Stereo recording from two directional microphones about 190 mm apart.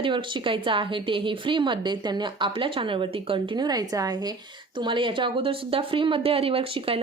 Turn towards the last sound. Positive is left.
turn(degrees=-30)  # may be behind; listen again after turning